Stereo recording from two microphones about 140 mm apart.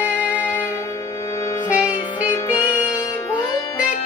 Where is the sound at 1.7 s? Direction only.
10° right (ahead or behind).